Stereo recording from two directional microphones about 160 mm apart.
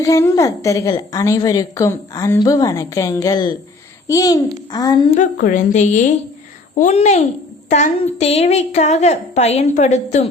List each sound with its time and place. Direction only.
0.0 s a woman's voice: 20° left (ahead or behind)
5.1 s a woman's voice: 55° left (ahead or behind)